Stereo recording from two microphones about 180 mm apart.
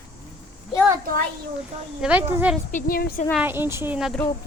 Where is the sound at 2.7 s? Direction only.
55° left (ahead or behind).